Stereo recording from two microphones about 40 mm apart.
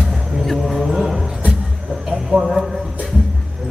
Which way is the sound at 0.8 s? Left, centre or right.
Centre.